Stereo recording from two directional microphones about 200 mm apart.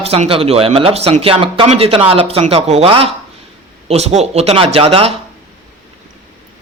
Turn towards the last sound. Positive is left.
turn(degrees=-25)  # may be behind; listen again after turning